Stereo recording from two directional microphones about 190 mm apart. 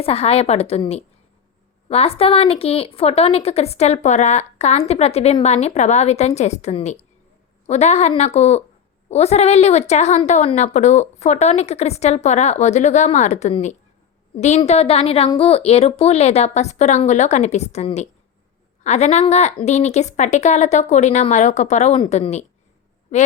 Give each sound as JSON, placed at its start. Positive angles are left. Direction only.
{"t": 0.0, "sound": "a woman's voice", "side_deg": 30}